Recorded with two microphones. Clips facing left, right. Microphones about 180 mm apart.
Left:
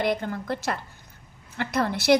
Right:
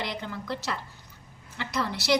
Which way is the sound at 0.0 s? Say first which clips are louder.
Left 8 dB; 50° left (ahead or behind).